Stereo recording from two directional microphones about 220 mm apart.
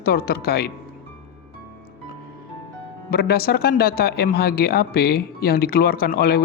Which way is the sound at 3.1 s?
45° left (ahead or behind).